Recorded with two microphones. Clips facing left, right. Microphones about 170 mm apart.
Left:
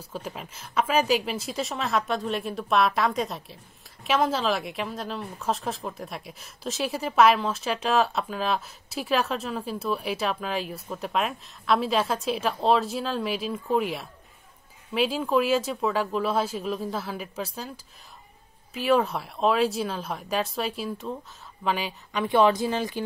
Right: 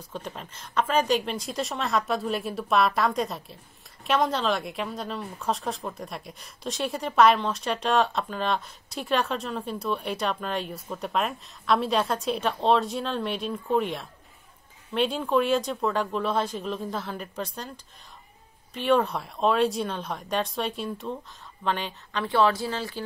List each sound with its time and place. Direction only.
0.0 s a woman's voice: 5° left (ahead or behind)